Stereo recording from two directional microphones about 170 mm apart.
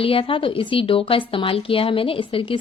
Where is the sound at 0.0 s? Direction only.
30° left (ahead or behind).